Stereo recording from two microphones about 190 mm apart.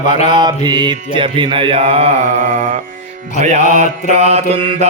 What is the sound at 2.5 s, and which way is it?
Music, 45° right (ahead or behind).